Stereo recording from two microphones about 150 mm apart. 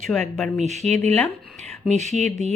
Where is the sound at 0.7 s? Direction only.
50° right (ahead or behind).